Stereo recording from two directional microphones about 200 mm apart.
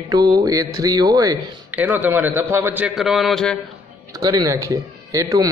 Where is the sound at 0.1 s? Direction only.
20° right (ahead or behind).